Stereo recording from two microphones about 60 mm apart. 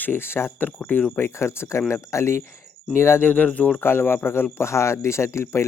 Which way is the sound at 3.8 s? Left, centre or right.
Left.